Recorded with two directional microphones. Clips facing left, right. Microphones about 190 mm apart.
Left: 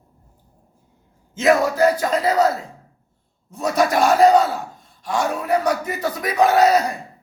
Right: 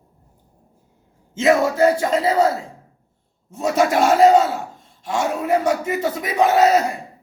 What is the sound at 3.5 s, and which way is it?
A man's voice, 25° right (ahead or behind).